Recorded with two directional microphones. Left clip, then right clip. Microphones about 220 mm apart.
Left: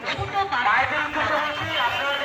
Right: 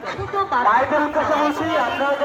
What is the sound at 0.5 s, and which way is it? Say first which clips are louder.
Speech: right 5 dB; 30° right (ahead or behind).